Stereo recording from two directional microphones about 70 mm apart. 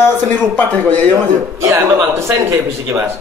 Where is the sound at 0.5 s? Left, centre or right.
Centre.